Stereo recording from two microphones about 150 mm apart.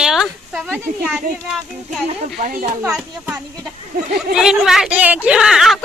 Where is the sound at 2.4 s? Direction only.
65° right (ahead or behind).